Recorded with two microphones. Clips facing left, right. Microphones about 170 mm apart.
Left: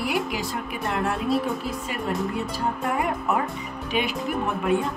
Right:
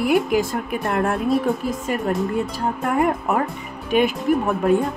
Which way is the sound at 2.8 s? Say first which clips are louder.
Right 7 dB; 50° right (ahead or behind).